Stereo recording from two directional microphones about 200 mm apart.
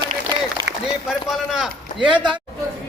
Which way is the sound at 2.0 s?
25° right (ahead or behind).